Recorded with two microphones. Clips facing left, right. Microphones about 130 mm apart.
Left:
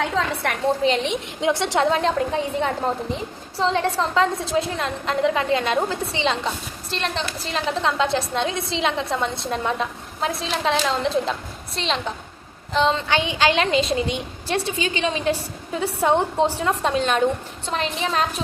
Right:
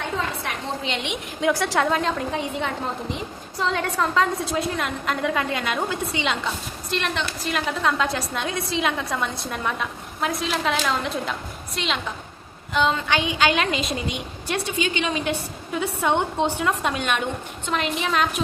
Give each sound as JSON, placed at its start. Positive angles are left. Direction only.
{"t": 0.4, "sound": "a woman's voice", "side_deg": 65}
{"t": 0.9, "sound": "a woman's voice", "side_deg": 35}
{"t": 1.4, "sound": "a woman's voice", "side_deg": 25}